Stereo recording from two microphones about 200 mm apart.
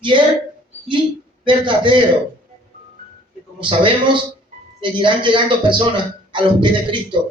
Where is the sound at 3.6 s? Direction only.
25° right (ahead or behind).